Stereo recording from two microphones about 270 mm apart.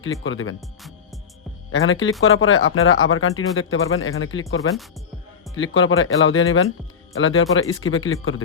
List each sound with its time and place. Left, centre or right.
0.2 s speech: left
0.8 s music: centre
1.7 s speech: left